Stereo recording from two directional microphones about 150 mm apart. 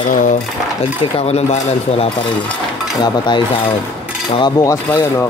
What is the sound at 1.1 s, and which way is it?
Speech, 45° left (ahead or behind).